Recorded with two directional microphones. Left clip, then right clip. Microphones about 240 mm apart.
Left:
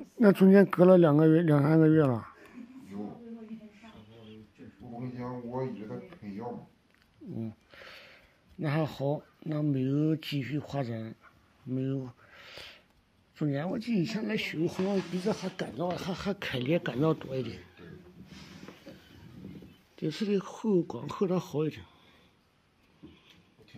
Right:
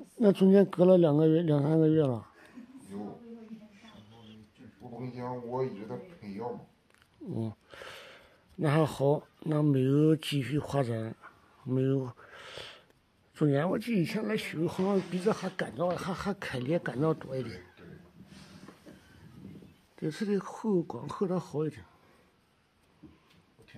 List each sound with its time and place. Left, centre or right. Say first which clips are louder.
0.2 s speech: left 2 dB; centre
7.3 s a sound: right 3 dB; right
13.3 s speech: right 5 dB; right; by 17.6 s centre
20.0 s speech: left 1 dB; centre